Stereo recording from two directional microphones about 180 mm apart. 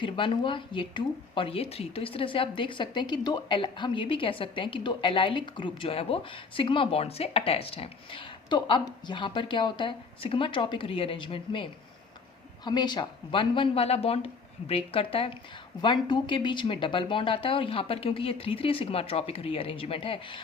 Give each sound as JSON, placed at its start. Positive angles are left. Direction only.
{"t": 0.0, "sound": "speech", "side_deg": 30}